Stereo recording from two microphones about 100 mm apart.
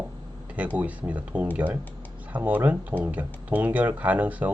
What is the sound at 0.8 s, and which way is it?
Speech, 15° right (ahead or behind).